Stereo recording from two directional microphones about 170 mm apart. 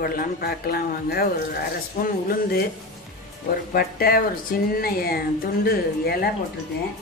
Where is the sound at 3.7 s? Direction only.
60° left (ahead or behind).